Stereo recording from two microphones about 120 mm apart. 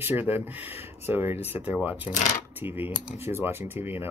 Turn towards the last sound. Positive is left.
turn(degrees=-20)  # may be behind; listen again after turning